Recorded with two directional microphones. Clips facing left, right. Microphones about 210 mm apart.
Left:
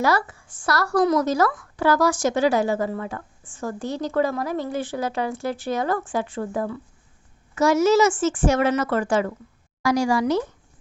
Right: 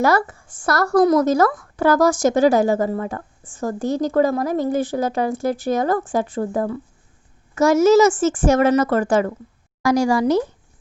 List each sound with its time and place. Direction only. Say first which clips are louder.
0.0 s a woman's voice: right 4 dB; 50° right (ahead or behind)